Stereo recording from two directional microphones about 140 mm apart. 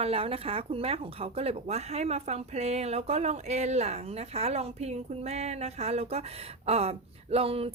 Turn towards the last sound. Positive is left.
turn(degrees=-45)  # may be behind; listen again after turning